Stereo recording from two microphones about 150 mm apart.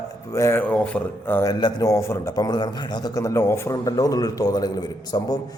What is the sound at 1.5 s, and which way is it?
A man's voice, 25° left (ahead or behind).